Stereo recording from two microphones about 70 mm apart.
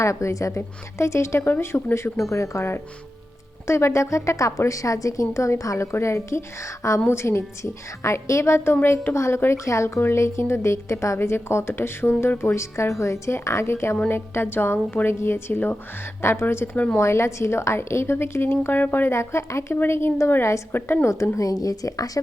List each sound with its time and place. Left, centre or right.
0.0 s a woman's voice: left
16.7 s a woman's voice: left
17.0 s speech: left
21.3 s speech: left